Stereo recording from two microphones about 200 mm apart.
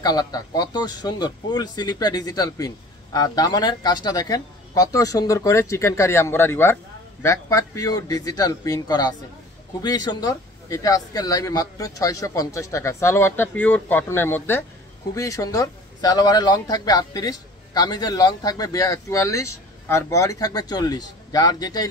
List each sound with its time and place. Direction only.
0.0 s speech: 20° left (ahead or behind)